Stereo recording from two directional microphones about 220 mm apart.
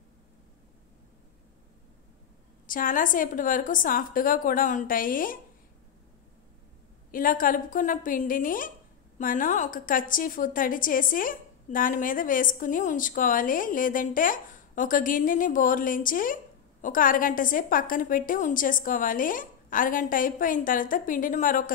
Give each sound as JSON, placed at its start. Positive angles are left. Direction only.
{"t": 2.6, "sound": "a woman's voice", "side_deg": 40}
{"t": 7.1, "sound": "a woman's voice", "side_deg": 40}